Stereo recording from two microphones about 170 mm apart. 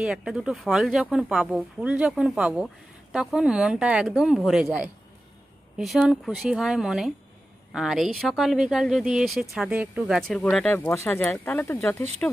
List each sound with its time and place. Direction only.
0.0 s speech: 5° right (ahead or behind); by 12.3 s 10° left (ahead or behind)